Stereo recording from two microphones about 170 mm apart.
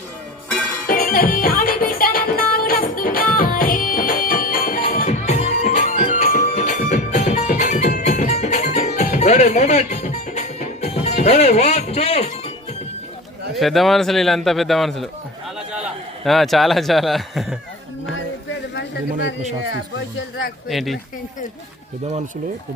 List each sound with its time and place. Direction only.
0.9 s music: 55° left (ahead or behind); by 12.3 s 40° left (ahead or behind)
13.6 s a man's voice: centre (ahead or behind)
18.7 s a sound: 90° left
20.7 s a man's voice: centre (ahead or behind)